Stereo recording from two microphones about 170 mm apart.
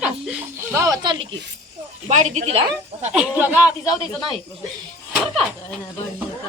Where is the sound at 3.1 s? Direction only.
10° right (ahead or behind).